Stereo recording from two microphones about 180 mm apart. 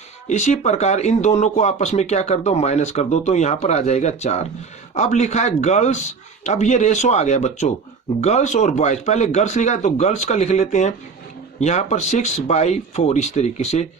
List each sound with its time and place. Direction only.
0.3 s speech: 40° left (ahead or behind)